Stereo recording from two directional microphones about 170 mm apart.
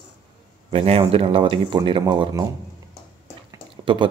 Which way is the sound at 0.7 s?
35° right (ahead or behind).